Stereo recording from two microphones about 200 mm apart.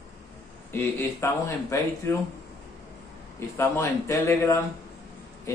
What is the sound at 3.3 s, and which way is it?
Speech, 15° left (ahead or behind).